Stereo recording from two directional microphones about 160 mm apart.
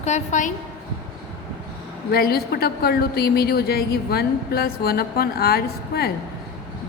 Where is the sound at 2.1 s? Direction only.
75° left (ahead or behind).